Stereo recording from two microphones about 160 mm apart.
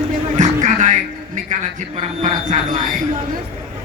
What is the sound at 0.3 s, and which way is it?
Music, 50° right (ahead or behind).